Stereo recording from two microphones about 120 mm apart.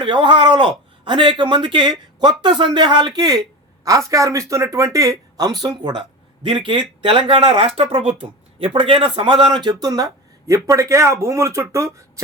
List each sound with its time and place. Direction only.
0.0 s speech: 45° right (ahead or behind); by 12.2 s 25° right (ahead or behind)